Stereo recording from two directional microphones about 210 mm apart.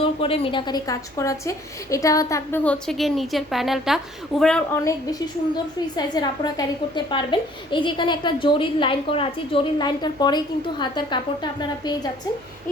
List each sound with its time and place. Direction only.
0.0 s a woman's voice: 25° left (ahead or behind); by 4.8 s 5° left (ahead or behind)
6.0 s a child's voice: 20° left (ahead or behind)